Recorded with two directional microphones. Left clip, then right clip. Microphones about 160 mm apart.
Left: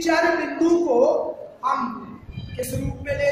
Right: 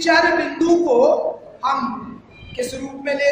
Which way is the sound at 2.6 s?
20° right (ahead or behind).